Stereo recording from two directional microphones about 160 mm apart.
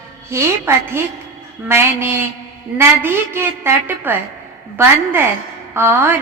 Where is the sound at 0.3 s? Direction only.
15° right (ahead or behind).